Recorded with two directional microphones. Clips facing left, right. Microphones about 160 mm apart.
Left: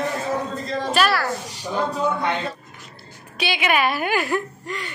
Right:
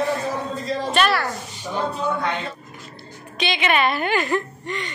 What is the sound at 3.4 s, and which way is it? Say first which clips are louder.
A woman's voice: even; 10° left (ahead or behind).